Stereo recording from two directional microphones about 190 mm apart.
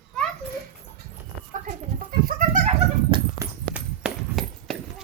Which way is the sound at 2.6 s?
25° right (ahead or behind).